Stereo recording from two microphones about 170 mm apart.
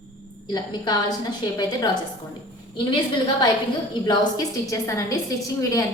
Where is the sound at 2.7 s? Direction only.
30° left (ahead or behind).